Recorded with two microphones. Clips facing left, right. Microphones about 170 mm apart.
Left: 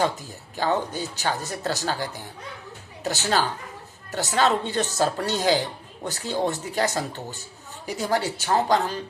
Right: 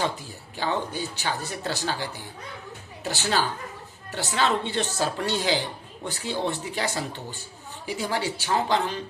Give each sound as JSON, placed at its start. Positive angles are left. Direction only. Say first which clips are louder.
{"t": 0.5, "sound": "speech", "louder": "left 3 dB", "side_deg": 45}